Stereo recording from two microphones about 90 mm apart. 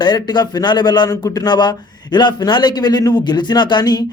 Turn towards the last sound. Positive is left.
turn(degrees=50)  # may be behind; listen again after turning